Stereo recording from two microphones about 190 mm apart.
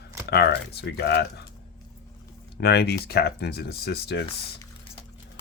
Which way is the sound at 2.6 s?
55° left (ahead or behind).